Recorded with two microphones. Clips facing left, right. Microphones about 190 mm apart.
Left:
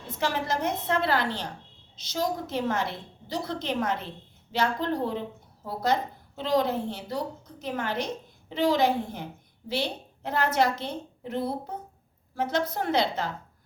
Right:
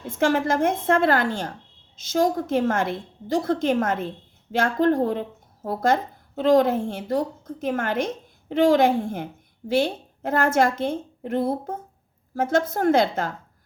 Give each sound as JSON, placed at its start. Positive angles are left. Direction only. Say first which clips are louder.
{"t": 0.1, "sound": "a woman's voice", "louder": "right 8 dB", "side_deg": -50}